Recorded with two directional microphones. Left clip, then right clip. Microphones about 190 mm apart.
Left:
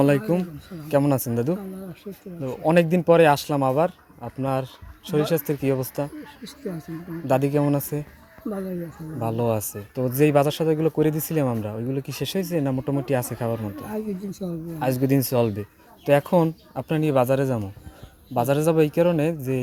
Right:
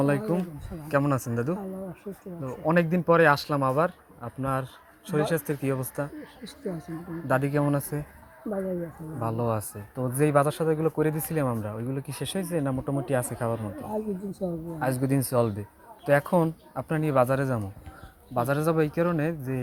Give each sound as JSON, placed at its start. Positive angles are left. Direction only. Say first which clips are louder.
{"t": 0.0, "sound": "a man's voice", "louder": "left 5 dB", "side_deg": 45}
{"t": 9.2, "sound": "speech", "louder": "left 4 dB", "side_deg": 40}